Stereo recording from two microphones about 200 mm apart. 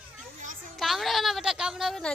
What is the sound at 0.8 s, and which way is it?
A woman's voice, centre (ahead or behind).